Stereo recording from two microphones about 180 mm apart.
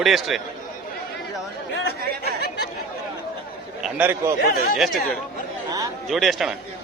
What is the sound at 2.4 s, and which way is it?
Chatter, 60° left (ahead or behind).